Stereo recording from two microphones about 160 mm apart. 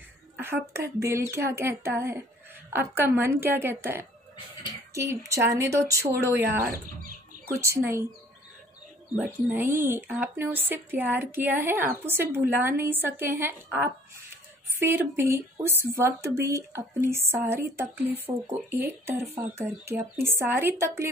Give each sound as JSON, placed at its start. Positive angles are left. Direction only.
{"t": 0.4, "sound": "a woman's voice", "side_deg": -15}
{"t": 9.2, "sound": "speech", "side_deg": -15}
{"t": 14.3, "sound": "a sound", "side_deg": -15}
{"t": 15.7, "sound": "speech", "side_deg": -15}